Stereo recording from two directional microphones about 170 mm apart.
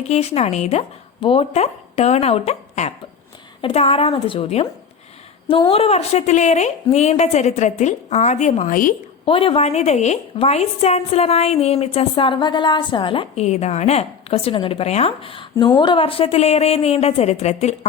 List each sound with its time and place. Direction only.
0.1 s a woman's voice: 40° left (ahead or behind)
9.2 s a woman's voice: 30° left (ahead or behind)